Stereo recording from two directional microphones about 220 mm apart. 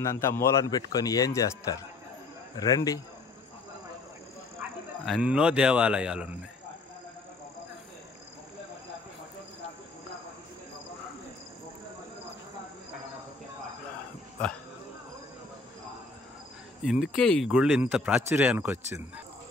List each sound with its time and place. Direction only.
0.0 s a man's voice: 15° left (ahead or behind)
5.0 s speech: 5° right (ahead or behind)
16.8 s speech: centre (ahead or behind)